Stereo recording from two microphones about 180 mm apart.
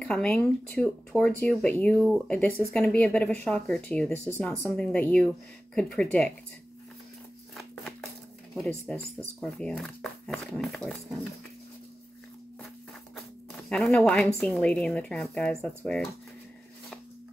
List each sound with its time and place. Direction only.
0.0 s speech: 5° left (ahead or behind)
8.5 s speech: 5° left (ahead or behind)
13.7 s speech: 5° left (ahead or behind)